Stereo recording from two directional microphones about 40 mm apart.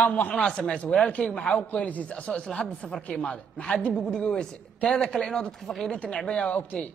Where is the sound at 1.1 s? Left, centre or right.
Left.